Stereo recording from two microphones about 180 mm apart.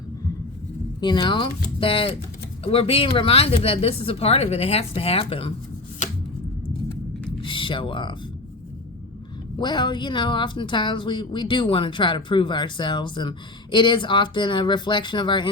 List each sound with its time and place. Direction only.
1.0 s speech: 25° left (ahead or behind)
7.4 s speech: 30° left (ahead or behind)
9.6 s speech: 25° left (ahead or behind)